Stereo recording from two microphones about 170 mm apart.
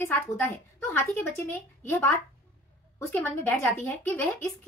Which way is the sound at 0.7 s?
15° left (ahead or behind).